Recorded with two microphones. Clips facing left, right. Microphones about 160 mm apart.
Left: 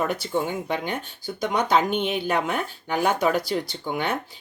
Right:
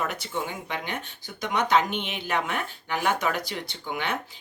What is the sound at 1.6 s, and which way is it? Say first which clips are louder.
Speech: left 2 dB; 40° left (ahead or behind).